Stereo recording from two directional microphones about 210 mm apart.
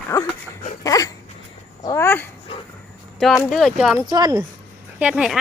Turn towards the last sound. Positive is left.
turn(degrees=0)  # may be behind; listen again after turning